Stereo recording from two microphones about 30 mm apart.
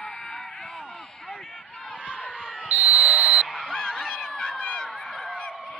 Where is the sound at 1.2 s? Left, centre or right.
Centre.